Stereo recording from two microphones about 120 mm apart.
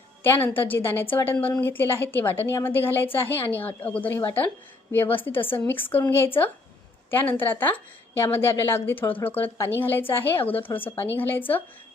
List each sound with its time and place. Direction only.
0.2 s a woman's voice: 15° left (ahead or behind)